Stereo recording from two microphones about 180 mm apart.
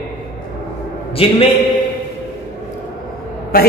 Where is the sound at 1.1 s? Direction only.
30° left (ahead or behind).